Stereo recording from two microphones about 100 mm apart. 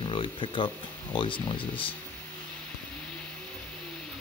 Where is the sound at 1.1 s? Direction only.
55° left (ahead or behind).